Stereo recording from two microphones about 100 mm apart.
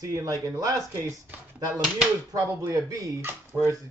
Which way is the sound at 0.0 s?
40° right (ahead or behind).